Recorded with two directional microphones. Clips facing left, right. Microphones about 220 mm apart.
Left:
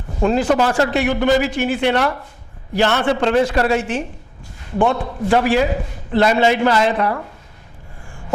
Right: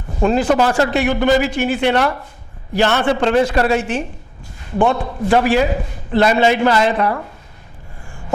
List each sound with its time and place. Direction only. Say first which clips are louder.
0.2 s a man's voice: right 1 dB; 25° right (ahead or behind)
4.8 s a man's voice: right 1 dB; 30° right (ahead or behind)